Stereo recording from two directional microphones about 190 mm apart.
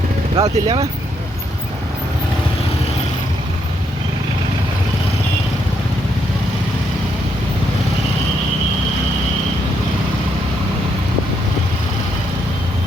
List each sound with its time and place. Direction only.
0.3 s speech: 20° right (ahead or behind)